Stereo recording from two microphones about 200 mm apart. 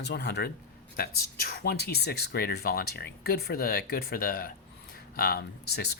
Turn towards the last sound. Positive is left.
turn(degrees=55)  # may be behind; listen again after turning